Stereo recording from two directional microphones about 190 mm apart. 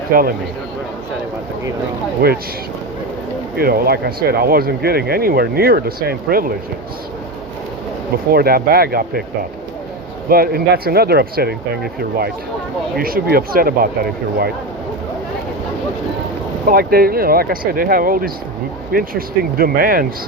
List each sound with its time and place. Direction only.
0.1 s speech: 50° right (ahead or behind)
2.2 s speech: 55° right (ahead or behind)
3.6 s speech: 55° right (ahead or behind)
8.3 s speech: 55° right (ahead or behind)
10.2 s speech: 50° right (ahead or behind)
13.0 s speech: 50° right (ahead or behind)
16.6 s speech: 50° right (ahead or behind)